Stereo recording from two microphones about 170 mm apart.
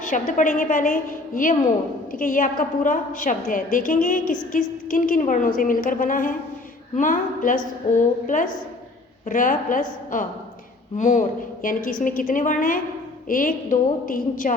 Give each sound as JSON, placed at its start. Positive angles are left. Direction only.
{"t": 0.0, "sound": "a woman's voice", "side_deg": 50}